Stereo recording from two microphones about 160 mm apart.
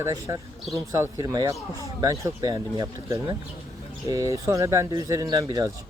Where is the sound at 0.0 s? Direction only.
20° right (ahead or behind).